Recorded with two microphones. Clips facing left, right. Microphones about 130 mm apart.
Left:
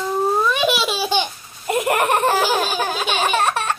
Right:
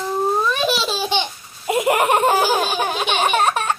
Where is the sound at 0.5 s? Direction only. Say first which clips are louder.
Left 1 dB; 10° left (ahead or behind).